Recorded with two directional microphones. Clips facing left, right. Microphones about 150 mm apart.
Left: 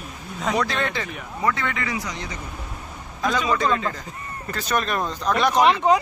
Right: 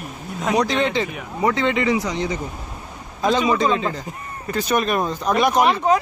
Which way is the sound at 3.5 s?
20° right (ahead or behind).